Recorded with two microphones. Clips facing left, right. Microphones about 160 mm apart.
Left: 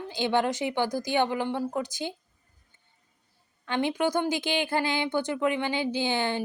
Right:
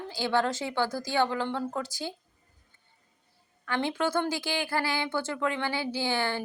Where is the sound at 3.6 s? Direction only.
20° left (ahead or behind).